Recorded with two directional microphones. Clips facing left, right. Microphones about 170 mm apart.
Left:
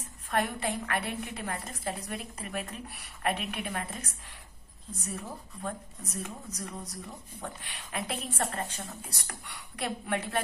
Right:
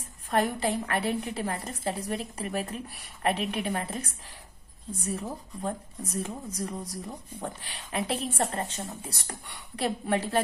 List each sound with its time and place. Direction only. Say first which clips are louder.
0.3 s speech: right 4 dB; 35° right (ahead or behind)